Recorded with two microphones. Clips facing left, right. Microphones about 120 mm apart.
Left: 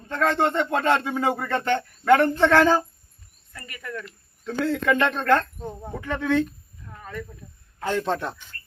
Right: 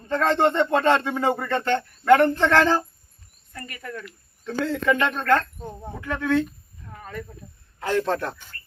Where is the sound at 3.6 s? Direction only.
35° right (ahead or behind).